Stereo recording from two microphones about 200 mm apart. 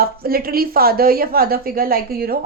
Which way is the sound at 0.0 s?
50° right (ahead or behind).